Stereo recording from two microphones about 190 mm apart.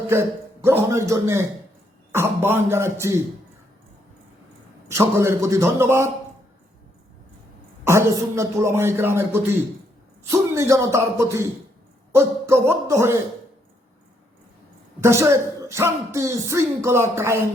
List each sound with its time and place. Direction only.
0.1 s music: 15° right (ahead or behind)
4.9 s music: 15° right (ahead or behind)
7.9 s music: 15° right (ahead or behind)
15.0 s music: 15° right (ahead or behind)